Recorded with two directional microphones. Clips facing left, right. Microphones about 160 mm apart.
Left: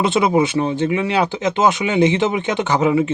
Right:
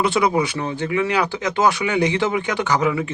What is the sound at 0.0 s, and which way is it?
Speech, 25° left (ahead or behind).